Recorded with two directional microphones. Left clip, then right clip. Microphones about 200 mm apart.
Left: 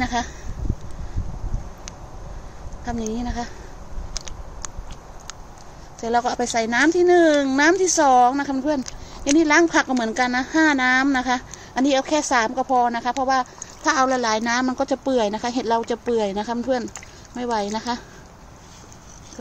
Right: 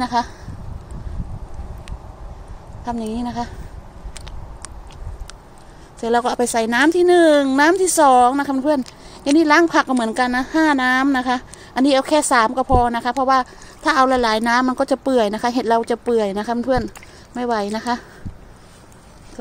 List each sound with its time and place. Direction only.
0.0 s a sound: 20° right (ahead or behind)
2.8 s speech: 25° right (ahead or behind)
5.9 s speech: 40° right (ahead or behind)